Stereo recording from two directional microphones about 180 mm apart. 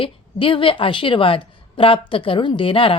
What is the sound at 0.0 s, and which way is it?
A woman's voice, 30° left (ahead or behind).